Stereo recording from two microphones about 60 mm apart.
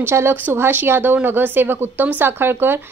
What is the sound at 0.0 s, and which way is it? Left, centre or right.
Speech, right.